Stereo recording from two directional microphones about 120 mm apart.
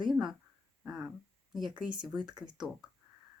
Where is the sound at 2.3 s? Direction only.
35° right (ahead or behind).